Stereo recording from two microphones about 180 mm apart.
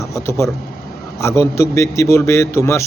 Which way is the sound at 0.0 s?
15° left (ahead or behind).